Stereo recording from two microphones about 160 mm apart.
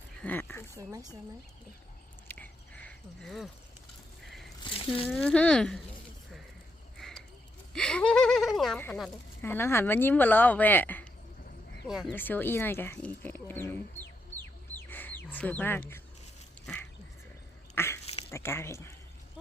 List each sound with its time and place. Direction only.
0.2 s a sound: 10° left (ahead or behind)
0.8 s speech: 20° right (ahead or behind)
2.2 s a sound: 10° left (ahead or behind)
4.6 s speech: 35° left (ahead or behind)
5.0 s speech: 10° left (ahead or behind)
7.0 s a sound: 5° left (ahead or behind)
8.8 s speech: 10° left (ahead or behind)
11.9 s speech: 5° right (ahead or behind)
12.1 s speech: 10° left (ahead or behind)
14.8 s bird: 10° left (ahead or behind)
17.7 s dog: 15° left (ahead or behind)
18.0 s a sound: 40° left (ahead or behind)
18.3 s speech: 15° left (ahead or behind)